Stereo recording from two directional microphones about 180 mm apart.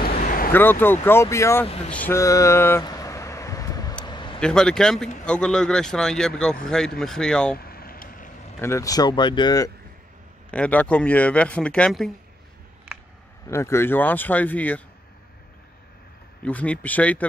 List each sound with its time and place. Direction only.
0.0 s a sound: 50° left (ahead or behind)
0.5 s speech: 10° left (ahead or behind)
2.8 s vehicle: 20° left (ahead or behind)
4.0 s a sound: 25° left (ahead or behind)
4.4 s speech: 5° left (ahead or behind)
7.5 s vehicle: 55° left (ahead or behind)
8.5 s speech: 15° left (ahead or behind)
10.5 s speech: 5° left (ahead or behind)
13.5 s speech: 15° left (ahead or behind)
16.4 s speech: 5° left (ahead or behind)